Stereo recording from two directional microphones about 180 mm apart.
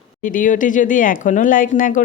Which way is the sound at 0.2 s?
45° left (ahead or behind).